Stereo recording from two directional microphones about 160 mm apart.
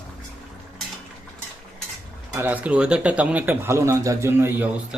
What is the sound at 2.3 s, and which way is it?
Speech, 10° right (ahead or behind).